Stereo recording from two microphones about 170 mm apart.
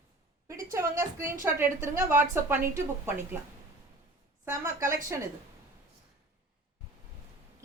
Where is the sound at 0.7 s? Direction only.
15° right (ahead or behind).